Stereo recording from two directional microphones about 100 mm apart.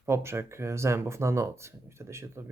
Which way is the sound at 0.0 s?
25° right (ahead or behind).